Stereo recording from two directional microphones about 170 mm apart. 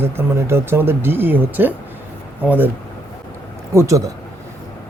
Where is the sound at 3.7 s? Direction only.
20° right (ahead or behind).